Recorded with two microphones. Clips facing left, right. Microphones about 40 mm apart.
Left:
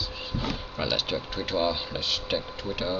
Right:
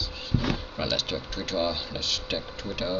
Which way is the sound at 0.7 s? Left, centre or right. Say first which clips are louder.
Left 1 dB; centre.